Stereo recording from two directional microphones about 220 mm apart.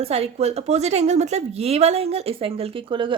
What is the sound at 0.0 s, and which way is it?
A woman's voice, 30° right (ahead or behind).